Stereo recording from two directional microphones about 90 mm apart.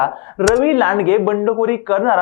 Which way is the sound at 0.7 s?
20° left (ahead or behind).